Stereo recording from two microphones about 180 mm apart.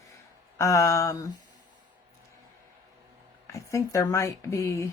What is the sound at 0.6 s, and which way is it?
Speech, 15° left (ahead or behind).